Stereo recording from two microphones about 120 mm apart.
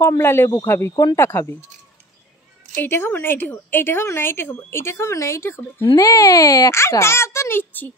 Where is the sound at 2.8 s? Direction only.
20° left (ahead or behind).